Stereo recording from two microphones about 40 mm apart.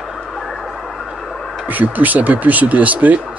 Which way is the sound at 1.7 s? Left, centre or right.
Right.